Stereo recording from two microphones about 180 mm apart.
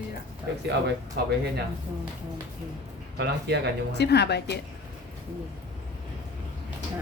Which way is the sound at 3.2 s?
65° right (ahead or behind).